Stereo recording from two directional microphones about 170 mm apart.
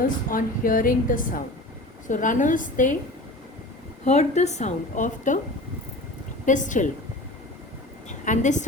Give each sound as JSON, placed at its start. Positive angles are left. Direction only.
{"t": 0.3, "sound": "a woman's voice", "side_deg": 55}
{"t": 4.0, "sound": "a woman's voice", "side_deg": 45}
{"t": 6.4, "sound": "a woman's voice", "side_deg": 45}
{"t": 8.2, "sound": "a woman's voice", "side_deg": 45}